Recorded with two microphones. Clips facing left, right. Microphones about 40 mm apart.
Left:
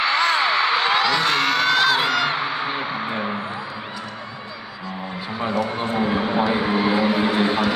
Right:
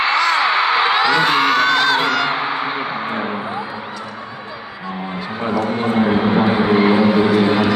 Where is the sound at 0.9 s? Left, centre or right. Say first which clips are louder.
Right 4 dB; centre.